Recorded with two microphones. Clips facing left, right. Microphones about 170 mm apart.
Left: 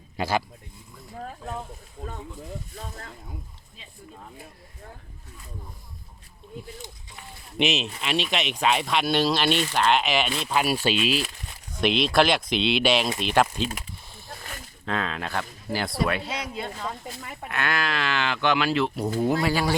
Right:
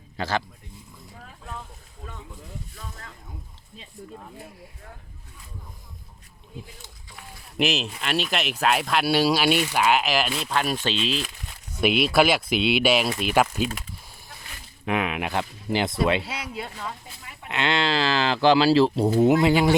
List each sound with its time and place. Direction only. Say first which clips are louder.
0.2 s speech: left 1 dB; 10° left (ahead or behind)
1.2 s a sound: left 6 dB; 40° left (ahead or behind)
2.7 s speech: left 3 dB; 40° left (ahead or behind)
7.2 s speech: even; centre (ahead or behind)
11.8 s speech: right 1 dB; 5° right (ahead or behind)
14.3 s snake: left 7 dB; 50° left (ahead or behind)
14.8 s speech: right 3 dB; 15° right (ahead or behind)
16.2 s speech: left 2 dB; 10° right (ahead or behind)
17.2 s speech: left 6 dB; 45° left (ahead or behind)
17.5 s speech: right 4 dB; 25° right (ahead or behind)